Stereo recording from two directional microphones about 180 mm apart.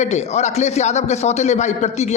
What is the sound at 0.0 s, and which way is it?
A man's voice, 40° left (ahead or behind).